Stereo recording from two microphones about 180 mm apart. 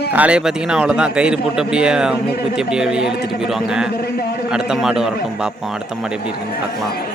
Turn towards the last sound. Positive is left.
turn(degrees=-5)  # may be behind; listen again after turning